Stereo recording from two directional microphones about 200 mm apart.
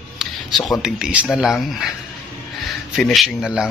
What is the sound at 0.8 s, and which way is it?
Speech, 5° right (ahead or behind).